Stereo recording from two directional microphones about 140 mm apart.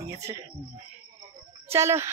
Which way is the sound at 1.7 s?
20° right (ahead or behind).